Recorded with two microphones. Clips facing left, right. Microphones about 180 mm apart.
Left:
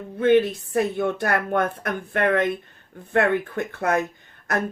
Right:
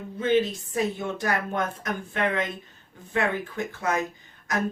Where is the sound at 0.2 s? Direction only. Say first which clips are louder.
Left 5 dB; 60° left (ahead or behind).